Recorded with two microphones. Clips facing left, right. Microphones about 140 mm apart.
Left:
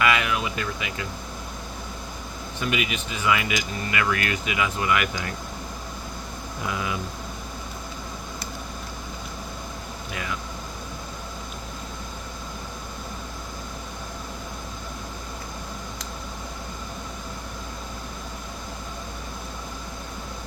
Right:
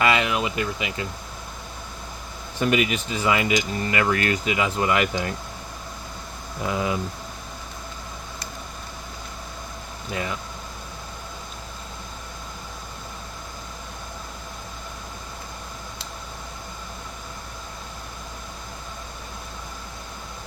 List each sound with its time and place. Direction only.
0.0 s a sound: 30° right (ahead or behind)
2.6 s speech: 40° right (ahead or behind)
6.7 s speech: 30° right (ahead or behind)